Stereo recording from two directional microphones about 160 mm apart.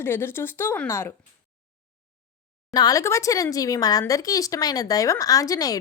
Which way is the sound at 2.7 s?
20° left (ahead or behind).